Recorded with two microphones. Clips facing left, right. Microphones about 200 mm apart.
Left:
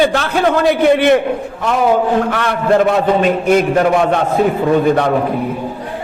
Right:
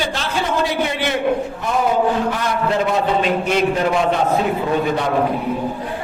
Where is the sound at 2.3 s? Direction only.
65° left (ahead or behind).